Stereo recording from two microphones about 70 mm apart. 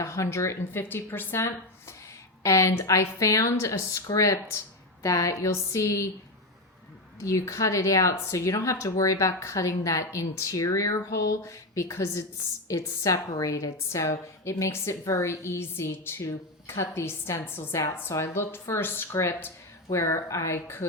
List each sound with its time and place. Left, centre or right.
0.0 s a woman's voice: left
2.4 s speech: left
7.2 s a woman's voice: left
19.9 s speech: left